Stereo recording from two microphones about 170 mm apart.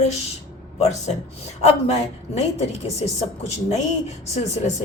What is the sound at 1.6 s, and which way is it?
Speech, 40° left (ahead or behind).